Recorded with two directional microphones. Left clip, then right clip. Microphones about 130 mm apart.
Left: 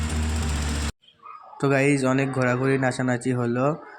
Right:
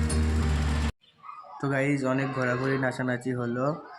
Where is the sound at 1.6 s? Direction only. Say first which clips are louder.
Left 6 dB; 40° left (ahead or behind).